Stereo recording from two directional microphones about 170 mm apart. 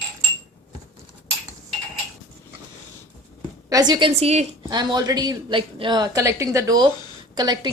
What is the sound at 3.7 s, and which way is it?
Speech, 25° right (ahead or behind).